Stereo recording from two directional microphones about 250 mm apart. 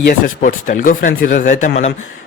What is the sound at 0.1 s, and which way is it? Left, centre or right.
A man's voice, left.